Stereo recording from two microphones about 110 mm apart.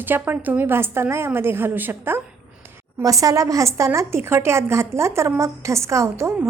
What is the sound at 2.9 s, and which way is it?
A woman's voice, 30° right (ahead or behind).